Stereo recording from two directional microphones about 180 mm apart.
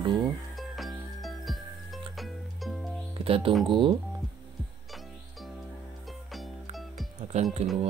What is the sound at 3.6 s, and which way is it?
Speech, 25° right (ahead or behind).